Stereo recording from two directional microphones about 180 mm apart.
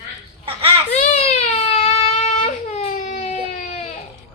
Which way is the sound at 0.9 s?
35° left (ahead or behind).